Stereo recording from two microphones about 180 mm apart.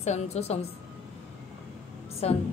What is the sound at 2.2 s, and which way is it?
Speech, 35° left (ahead or behind).